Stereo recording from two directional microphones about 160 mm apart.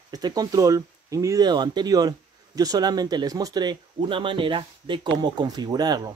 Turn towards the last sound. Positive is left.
turn(degrees=-25)  # may be behind; listen again after turning